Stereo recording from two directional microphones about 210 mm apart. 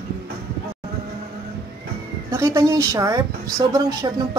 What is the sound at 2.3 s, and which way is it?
Speech, 15° right (ahead or behind).